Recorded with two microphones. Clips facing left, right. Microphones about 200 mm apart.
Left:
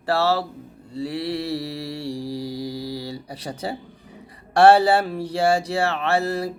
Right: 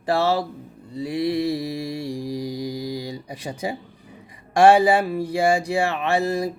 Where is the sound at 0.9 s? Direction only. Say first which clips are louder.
Right 3 dB; 15° right (ahead or behind).